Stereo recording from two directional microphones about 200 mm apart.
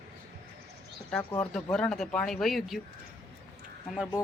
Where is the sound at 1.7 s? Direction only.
5° left (ahead or behind).